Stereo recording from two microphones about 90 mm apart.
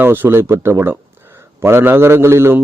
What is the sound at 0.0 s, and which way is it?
Speech, 25° right (ahead or behind).